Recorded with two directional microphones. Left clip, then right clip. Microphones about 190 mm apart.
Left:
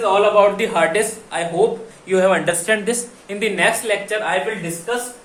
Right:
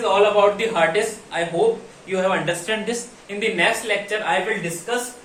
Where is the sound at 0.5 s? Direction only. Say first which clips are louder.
Left 2 dB; 30° left (ahead or behind).